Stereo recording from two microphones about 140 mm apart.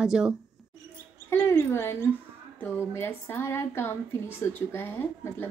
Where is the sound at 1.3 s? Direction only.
15° left (ahead or behind).